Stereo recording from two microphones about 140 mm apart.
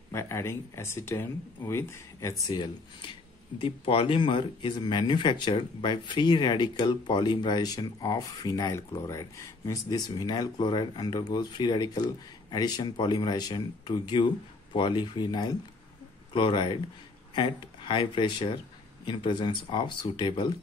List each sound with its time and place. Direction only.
0.1 s speech: 20° left (ahead or behind)
3.5 s speech: 40° left (ahead or behind)